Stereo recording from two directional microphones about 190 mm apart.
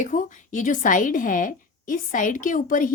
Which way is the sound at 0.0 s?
40° left (ahead or behind).